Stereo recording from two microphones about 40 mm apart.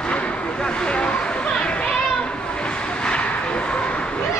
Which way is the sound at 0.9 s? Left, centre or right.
Left.